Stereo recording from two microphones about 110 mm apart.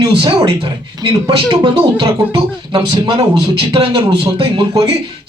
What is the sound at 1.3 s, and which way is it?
A man's voice, 40° right (ahead or behind).